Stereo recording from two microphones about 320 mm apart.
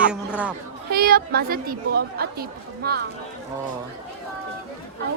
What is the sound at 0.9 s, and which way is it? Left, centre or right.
Speech, right.